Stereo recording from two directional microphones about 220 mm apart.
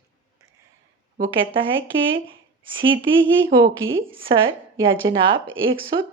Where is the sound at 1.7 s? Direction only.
60° right (ahead or behind).